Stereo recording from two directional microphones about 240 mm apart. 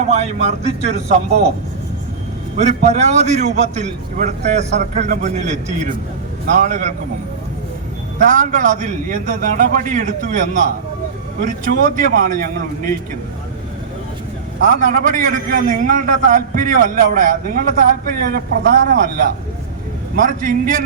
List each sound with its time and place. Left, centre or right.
0.1 s a man's voice: right
2.6 s a man's voice: right
8.2 s a man's voice: right
14.6 s a man's voice: right
20.1 s a man's voice: right